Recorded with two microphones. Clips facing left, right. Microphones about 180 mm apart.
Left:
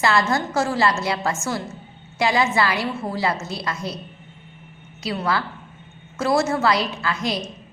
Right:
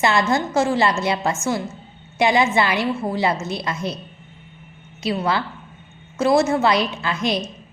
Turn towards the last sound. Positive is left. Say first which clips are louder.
# right 2 dB
turn(degrees=-20)  # may be behind; listen again after turning